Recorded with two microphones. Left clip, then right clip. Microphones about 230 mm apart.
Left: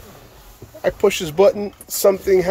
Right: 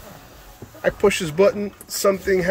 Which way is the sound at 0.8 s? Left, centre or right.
Centre.